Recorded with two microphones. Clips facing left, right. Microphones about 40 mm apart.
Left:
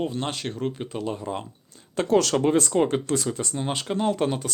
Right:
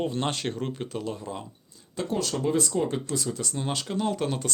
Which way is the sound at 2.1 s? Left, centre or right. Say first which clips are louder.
Left 9 dB; left.